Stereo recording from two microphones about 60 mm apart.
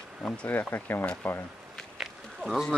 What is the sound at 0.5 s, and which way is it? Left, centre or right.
Speech, left.